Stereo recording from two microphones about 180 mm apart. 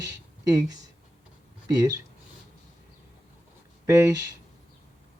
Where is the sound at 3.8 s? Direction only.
15° right (ahead or behind).